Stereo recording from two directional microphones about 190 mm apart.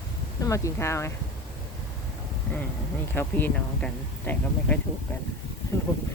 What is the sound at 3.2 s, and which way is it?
Speech, 10° left (ahead or behind).